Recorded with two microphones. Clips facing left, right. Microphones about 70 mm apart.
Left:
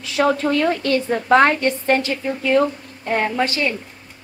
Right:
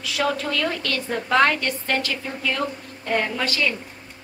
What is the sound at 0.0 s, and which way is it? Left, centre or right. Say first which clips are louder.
A woman's voice: left 6 dB; left.